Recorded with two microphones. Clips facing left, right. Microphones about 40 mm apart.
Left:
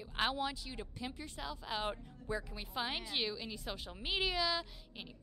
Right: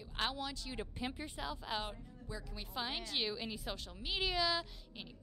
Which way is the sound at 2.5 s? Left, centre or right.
Centre.